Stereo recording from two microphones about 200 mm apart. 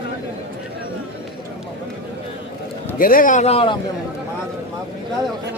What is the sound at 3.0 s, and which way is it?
Speech, 45° left (ahead or behind).